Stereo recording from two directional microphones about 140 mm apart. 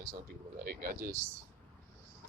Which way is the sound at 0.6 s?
90° right.